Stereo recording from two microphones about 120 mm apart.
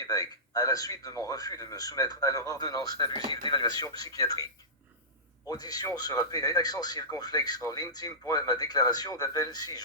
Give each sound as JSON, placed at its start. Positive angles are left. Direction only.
{"t": 0.0, "sound": "speech", "side_deg": 30}
{"t": 5.5, "sound": "speech", "side_deg": 35}